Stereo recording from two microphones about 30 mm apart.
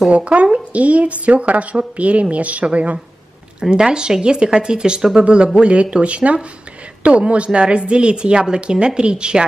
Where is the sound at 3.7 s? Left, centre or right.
Right.